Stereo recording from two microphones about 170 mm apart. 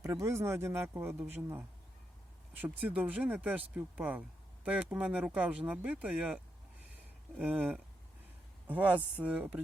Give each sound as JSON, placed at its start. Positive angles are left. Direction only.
{"t": 0.0, "sound": "speech", "side_deg": -15}